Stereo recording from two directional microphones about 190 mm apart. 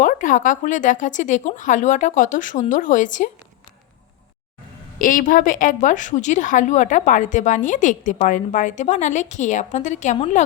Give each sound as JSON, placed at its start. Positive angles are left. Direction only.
{"t": 0.0, "sound": "speech", "side_deg": 45}
{"t": 4.9, "sound": "a woman's voice", "side_deg": 45}